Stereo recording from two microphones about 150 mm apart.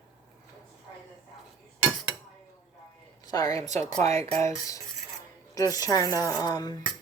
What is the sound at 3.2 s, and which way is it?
Speech, 25° left (ahead or behind).